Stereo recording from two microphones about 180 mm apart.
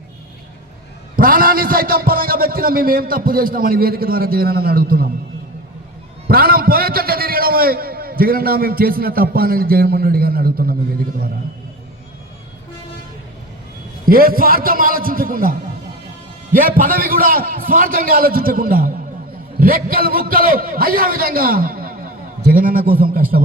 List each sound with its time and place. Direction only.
1.1 s a man's voice: 55° right (ahead or behind)
6.2 s a man's voice: 55° right (ahead or behind)
14.0 s a man's voice: 55° right (ahead or behind)